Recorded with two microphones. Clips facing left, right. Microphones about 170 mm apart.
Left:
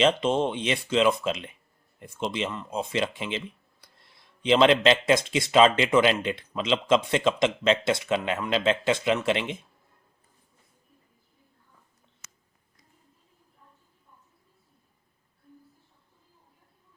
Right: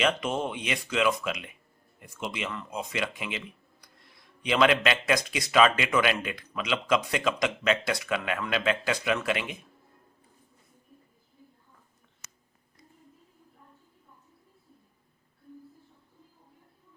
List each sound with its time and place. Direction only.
0.0 s speech: 30° left (ahead or behind)